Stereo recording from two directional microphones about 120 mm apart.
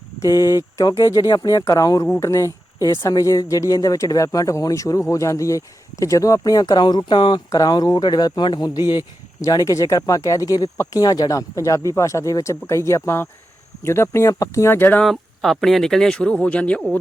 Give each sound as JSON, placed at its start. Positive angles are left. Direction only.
{"t": 0.2, "sound": "speech", "side_deg": 30}
{"t": 15.0, "sound": "speech", "side_deg": 0}